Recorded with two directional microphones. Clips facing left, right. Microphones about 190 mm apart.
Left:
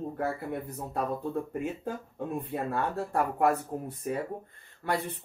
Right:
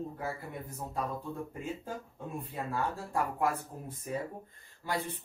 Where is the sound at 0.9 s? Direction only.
60° left (ahead or behind).